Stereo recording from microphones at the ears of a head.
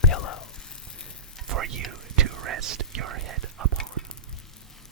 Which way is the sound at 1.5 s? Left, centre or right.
Right.